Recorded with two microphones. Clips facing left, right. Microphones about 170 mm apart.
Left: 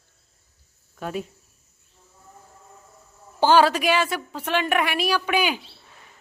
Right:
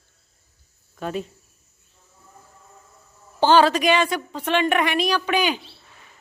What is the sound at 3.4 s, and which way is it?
A woman's voice, 10° left (ahead or behind).